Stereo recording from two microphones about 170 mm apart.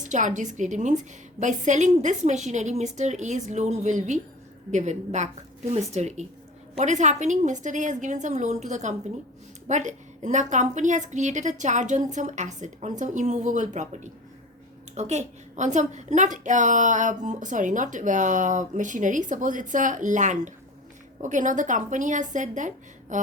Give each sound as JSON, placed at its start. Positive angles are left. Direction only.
{"t": 0.0, "sound": "a woman's voice", "side_deg": -45}